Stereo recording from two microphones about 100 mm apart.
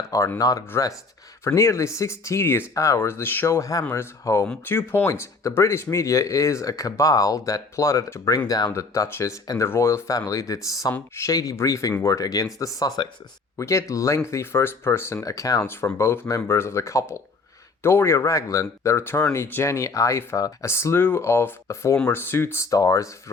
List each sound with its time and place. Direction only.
0.3 s speech: 35° left (ahead or behind)